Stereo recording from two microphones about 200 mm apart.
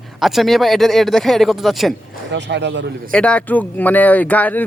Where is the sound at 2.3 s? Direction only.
60° right (ahead or behind).